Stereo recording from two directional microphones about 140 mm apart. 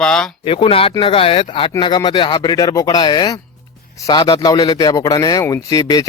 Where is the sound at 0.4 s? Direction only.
40° left (ahead or behind).